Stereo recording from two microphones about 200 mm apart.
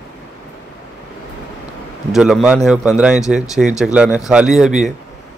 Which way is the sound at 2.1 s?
Centre (ahead or behind).